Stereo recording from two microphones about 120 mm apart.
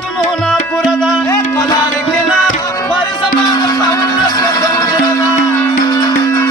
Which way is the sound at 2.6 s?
25° left (ahead or behind).